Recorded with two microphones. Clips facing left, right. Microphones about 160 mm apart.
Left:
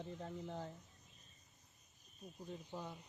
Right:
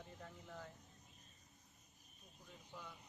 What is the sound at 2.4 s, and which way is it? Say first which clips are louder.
Speech: left 8 dB; 35° left (ahead or behind).